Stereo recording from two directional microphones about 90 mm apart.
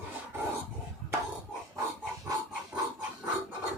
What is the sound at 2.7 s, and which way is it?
Dog, 15° right (ahead or behind).